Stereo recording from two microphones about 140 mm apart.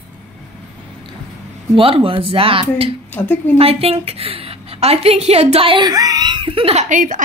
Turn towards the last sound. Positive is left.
turn(degrees=-65)  # may be behind; listen again after turning